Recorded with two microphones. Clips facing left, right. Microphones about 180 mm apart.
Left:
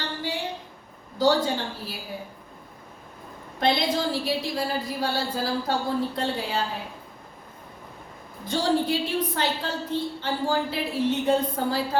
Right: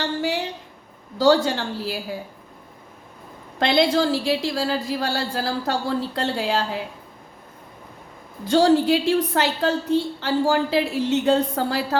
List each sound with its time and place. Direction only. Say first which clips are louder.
0.0 s a sound: right 7 dB; 80° right
1.2 s a woman's voice: right 4 dB; 85° right
3.6 s speech: right 5 dB; 80° right
8.5 s a woman's voice: right 7 dB; 85° right